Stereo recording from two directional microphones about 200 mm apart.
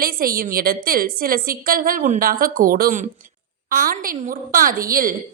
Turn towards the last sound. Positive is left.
turn(degrees=-45)  # may be behind; listen again after turning